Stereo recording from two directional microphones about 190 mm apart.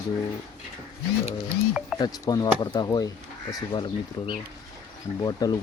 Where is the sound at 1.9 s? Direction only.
20° left (ahead or behind).